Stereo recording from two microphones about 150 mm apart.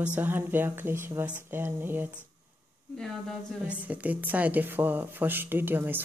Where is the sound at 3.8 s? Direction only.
10° right (ahead or behind).